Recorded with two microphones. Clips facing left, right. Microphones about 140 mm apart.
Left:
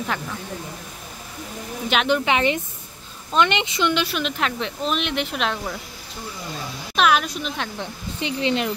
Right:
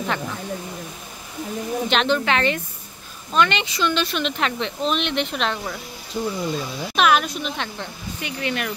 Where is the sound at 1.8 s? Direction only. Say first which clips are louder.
Left 1 dB; 10° left (ahead or behind).